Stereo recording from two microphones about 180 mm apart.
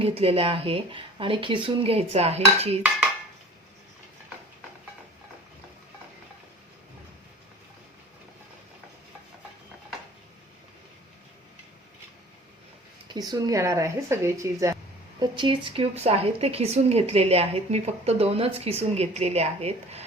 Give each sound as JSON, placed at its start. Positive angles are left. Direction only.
{"t": 0.0, "sound": "speech", "side_deg": -30}
{"t": 13.1, "sound": "speech", "side_deg": -20}
{"t": 15.2, "sound": "speech", "side_deg": -25}